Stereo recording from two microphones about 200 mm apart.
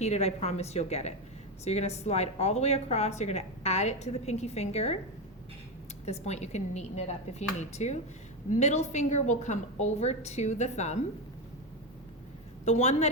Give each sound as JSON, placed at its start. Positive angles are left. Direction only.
{"t": 0.0, "sound": "speech", "side_deg": 35}
{"t": 6.1, "sound": "speech", "side_deg": 35}
{"t": 12.6, "sound": "speech", "side_deg": 35}